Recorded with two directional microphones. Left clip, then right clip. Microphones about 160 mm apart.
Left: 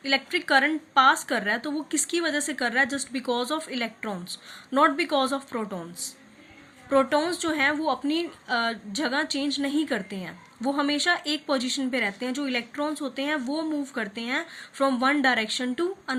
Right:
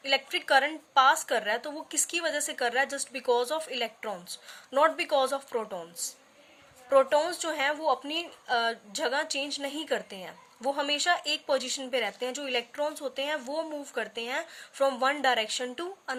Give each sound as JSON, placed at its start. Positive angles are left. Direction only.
{"t": 0.0, "sound": "a woman's voice", "side_deg": -40}
{"t": 6.9, "sound": "a woman's voice", "side_deg": -35}